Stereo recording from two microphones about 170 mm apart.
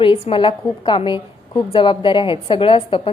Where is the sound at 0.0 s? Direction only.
30° left (ahead or behind).